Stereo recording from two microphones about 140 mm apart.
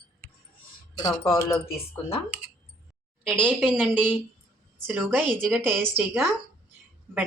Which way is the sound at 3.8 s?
10° right (ahead or behind).